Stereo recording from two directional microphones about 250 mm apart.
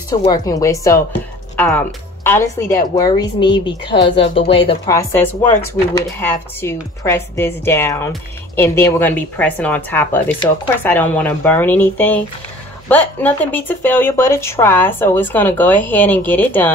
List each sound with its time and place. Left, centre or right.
0.1 s a woman's voice: centre